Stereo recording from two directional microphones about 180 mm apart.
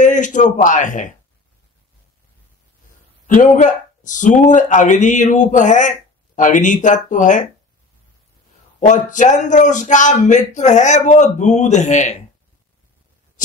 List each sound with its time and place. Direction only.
0.0 s a man's voice: 45° left (ahead or behind)
3.3 s speech: 45° left (ahead or behind)
8.7 s speech: 45° left (ahead or behind)